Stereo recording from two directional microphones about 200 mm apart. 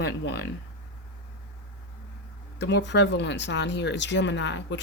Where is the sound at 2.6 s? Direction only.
60° left (ahead or behind).